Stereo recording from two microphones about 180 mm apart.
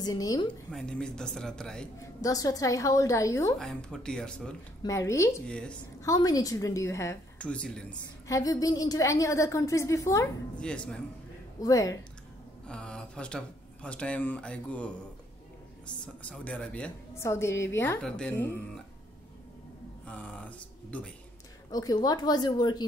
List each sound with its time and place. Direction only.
0.0 s a woman's voice: 20° left (ahead or behind)
0.7 s a man's voice: 5° left (ahead or behind)
2.0 s a woman's voice: 20° left (ahead or behind)
3.5 s a man's voice: 5° left (ahead or behind)
4.8 s a woman's voice: 15° left (ahead or behind)
5.5 s a man's voice: 5° left (ahead or behind)
6.0 s a woman's voice: 20° left (ahead or behind)
8.3 s a woman's voice: 20° left (ahead or behind)
10.5 s a man's voice: 5° left (ahead or behind)
11.6 s a woman's voice: 20° left (ahead or behind)
12.6 s a woman's voice: 5° left (ahead or behind)
16.2 s a woman's voice: 10° left (ahead or behind)
20.1 s speech: 10° left (ahead or behind)
21.6 s a woman's voice: 20° left (ahead or behind)